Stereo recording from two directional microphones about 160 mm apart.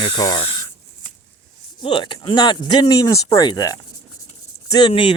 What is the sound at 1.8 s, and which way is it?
Speech, 30° left (ahead or behind).